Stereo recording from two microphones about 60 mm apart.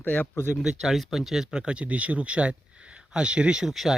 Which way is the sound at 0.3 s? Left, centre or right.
Left.